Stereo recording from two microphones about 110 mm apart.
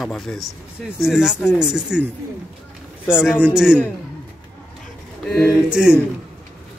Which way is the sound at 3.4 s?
5° right (ahead or behind).